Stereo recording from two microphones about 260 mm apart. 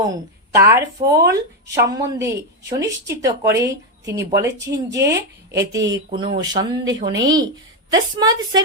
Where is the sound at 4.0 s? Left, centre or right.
Right.